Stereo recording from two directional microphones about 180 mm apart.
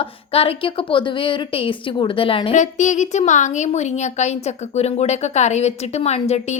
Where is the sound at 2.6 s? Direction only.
40° left (ahead or behind).